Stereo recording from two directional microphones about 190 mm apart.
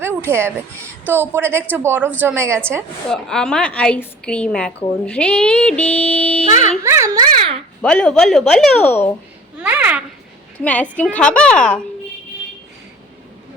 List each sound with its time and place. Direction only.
0.0 s a sound: 10° right (ahead or behind)
1.0 s a woman's voice: 10° right (ahead or behind)
3.1 s a woman's voice: 5° left (ahead or behind)
6.5 s speech: 40° left (ahead or behind)
6.8 s a child's voice: 15° right (ahead or behind)
7.8 s a woman's voice: 5° left (ahead or behind)
9.6 s a child's voice: 10° right (ahead or behind)
10.6 s a woman's voice: 10° left (ahead or behind)